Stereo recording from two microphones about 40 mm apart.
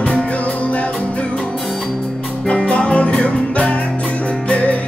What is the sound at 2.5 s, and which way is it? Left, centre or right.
Music, left.